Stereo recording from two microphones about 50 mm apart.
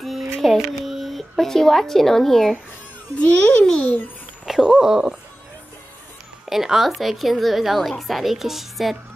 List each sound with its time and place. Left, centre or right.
0.4 s a sound: centre
3.2 s a child's voice: left
4.5 s dog: centre
6.4 s speech: centre